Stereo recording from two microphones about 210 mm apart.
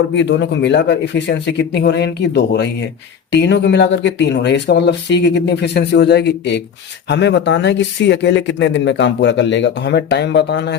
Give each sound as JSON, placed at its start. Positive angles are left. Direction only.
{"t": 0.1, "sound": "speech", "side_deg": 55}